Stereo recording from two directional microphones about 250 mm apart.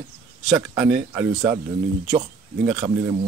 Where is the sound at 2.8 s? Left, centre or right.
Right.